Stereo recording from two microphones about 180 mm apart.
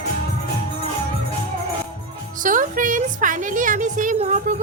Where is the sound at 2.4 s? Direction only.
45° right (ahead or behind).